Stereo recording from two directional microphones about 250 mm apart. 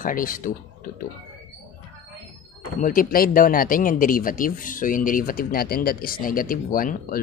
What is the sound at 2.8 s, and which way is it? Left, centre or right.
Speech, left.